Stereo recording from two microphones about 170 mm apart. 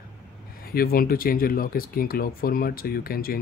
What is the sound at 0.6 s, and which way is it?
Speech, 60° left (ahead or behind).